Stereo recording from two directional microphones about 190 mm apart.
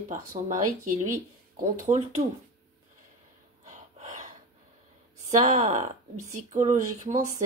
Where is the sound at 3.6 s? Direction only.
40° right (ahead or behind).